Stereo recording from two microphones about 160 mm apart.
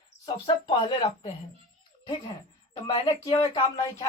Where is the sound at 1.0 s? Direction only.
40° left (ahead or behind).